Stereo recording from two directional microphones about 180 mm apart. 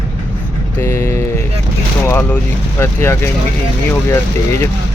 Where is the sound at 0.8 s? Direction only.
10° left (ahead or behind).